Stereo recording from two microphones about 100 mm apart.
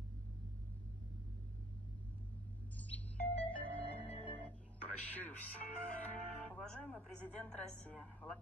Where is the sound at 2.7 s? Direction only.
15° left (ahead or behind).